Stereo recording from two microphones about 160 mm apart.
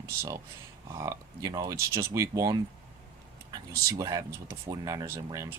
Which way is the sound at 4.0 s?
25° right (ahead or behind).